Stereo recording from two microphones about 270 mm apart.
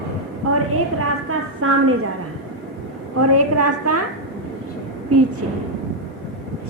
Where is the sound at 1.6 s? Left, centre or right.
Right.